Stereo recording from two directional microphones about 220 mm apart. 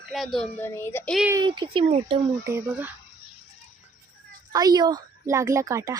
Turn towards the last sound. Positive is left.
turn(degrees=-15)  # may be behind; listen again after turning